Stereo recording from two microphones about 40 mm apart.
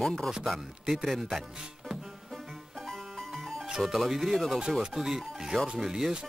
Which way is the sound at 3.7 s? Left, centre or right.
Centre.